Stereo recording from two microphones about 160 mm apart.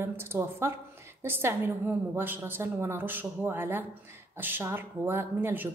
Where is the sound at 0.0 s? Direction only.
15° right (ahead or behind).